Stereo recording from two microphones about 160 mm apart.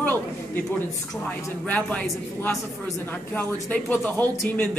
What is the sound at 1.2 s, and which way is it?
A woman's voice, 10° left (ahead or behind).